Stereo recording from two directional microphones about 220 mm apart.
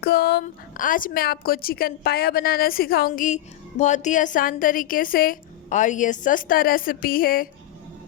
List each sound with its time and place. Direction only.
0.0 s speech: 50° left (ahead or behind)
0.4 s a woman's voice: 40° left (ahead or behind)